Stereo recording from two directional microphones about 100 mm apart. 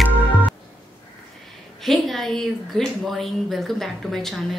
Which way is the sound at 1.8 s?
Centre (ahead or behind).